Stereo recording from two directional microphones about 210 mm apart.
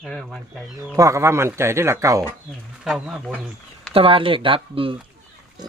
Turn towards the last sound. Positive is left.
turn(degrees=-25)  # may be behind; listen again after turning